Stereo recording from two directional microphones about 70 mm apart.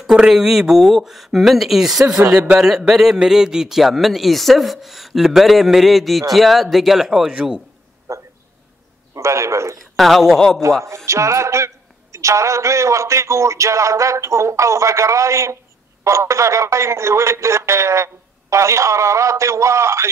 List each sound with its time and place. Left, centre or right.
0.0 s a man's voice: centre
2.3 s a man's voice: centre
8.1 s a sound: right
9.1 s speech: right
9.9 s a man's voice: centre
11.1 s speech: right